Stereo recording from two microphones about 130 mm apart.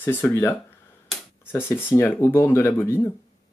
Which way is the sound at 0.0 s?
15° left (ahead or behind).